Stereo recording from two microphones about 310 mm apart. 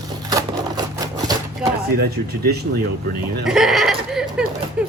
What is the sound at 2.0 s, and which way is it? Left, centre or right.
Speech, right.